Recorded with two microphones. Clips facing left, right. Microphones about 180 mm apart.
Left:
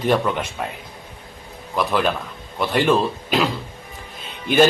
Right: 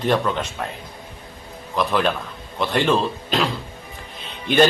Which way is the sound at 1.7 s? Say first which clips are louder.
Even; 5° left (ahead or behind).